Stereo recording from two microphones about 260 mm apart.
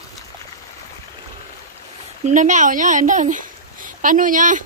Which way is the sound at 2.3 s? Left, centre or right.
Right.